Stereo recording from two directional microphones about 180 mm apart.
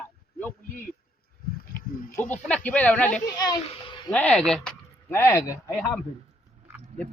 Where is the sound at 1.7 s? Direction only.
10° left (ahead or behind).